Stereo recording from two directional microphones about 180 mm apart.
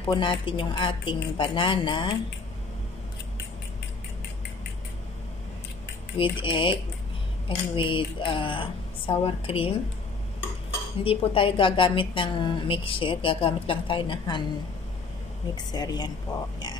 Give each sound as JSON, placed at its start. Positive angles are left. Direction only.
{"t": 0.0, "sound": "a woman's voice", "side_deg": 25}
{"t": 6.1, "sound": "a woman's voice", "side_deg": 30}
{"t": 11.1, "sound": "a woman's voice", "side_deg": 30}
{"t": 15.5, "sound": "a woman's voice", "side_deg": 20}